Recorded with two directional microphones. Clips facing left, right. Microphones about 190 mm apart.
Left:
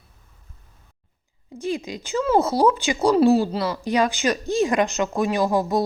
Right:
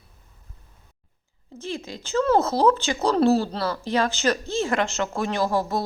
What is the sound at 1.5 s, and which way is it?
Speech, 15° left (ahead or behind).